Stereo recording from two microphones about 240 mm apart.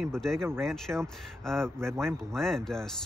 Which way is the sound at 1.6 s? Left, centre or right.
Centre.